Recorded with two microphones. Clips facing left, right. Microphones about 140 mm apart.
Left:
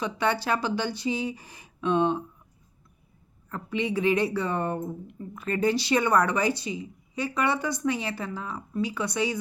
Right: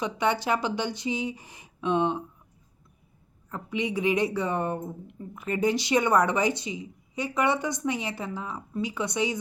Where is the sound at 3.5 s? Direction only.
15° right (ahead or behind).